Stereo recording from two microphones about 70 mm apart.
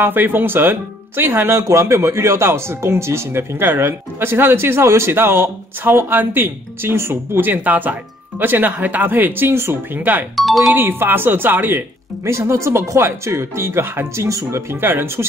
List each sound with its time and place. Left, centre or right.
0.0 s speech: right
10.3 s speech: centre
10.7 s speech: right
12.3 s speech: right
14.8 s speech: right